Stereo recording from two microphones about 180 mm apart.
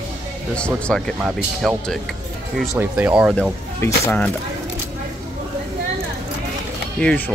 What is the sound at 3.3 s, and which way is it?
Speech, 5° left (ahead or behind).